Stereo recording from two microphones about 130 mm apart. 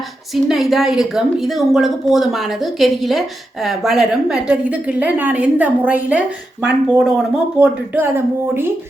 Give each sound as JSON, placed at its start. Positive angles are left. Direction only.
{"t": 0.4, "sound": "a woman's voice", "side_deg": 0}
{"t": 7.9, "sound": "a woman's voice", "side_deg": -15}